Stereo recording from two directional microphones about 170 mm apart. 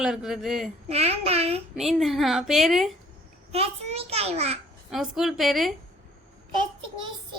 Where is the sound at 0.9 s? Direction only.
35° right (ahead or behind).